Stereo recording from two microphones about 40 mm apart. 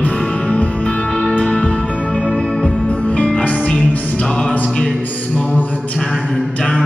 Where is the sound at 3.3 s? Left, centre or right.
Left.